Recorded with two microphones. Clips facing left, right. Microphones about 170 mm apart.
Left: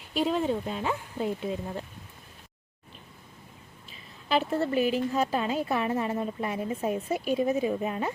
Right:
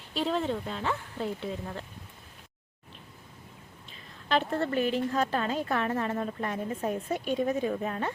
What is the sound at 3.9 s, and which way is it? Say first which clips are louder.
A woman's voice: left 1 dB; 5° left (ahead or behind).